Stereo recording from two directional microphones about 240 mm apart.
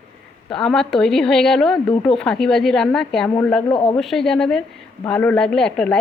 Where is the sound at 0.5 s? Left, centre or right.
Centre.